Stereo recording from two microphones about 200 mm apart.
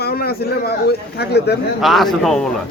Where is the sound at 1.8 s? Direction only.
Centre (ahead or behind).